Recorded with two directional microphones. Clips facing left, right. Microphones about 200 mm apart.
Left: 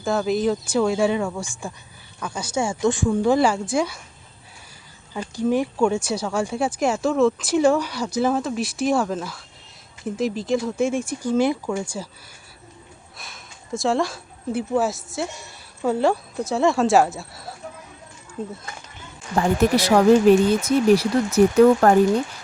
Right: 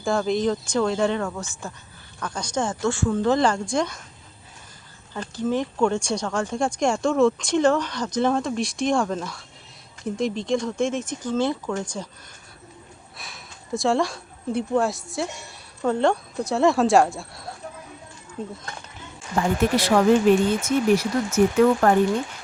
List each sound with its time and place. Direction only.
0.0 s speech: 5° left (ahead or behind)
5.1 s speech: 10° left (ahead or behind)
13.1 s speech: centre (ahead or behind)
19.6 s speech: 40° left (ahead or behind)